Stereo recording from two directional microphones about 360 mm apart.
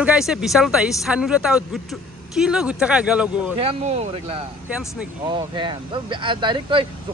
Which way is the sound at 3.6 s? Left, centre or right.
Centre.